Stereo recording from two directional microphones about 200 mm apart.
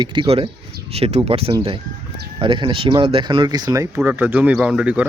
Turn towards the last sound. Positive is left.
turn(degrees=-5)  # may be behind; listen again after turning